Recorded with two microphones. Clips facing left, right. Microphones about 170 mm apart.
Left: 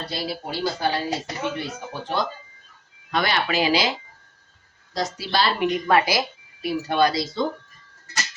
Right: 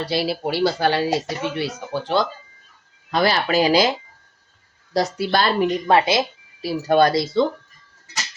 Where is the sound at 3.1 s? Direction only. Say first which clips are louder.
Right 4 dB; 35° right (ahead or behind).